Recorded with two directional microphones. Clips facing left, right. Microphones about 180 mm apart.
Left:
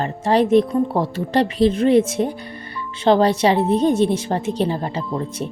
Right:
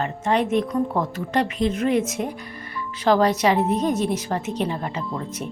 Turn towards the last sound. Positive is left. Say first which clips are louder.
# left 4 dB
turn(degrees=30)  # may be behind; listen again after turning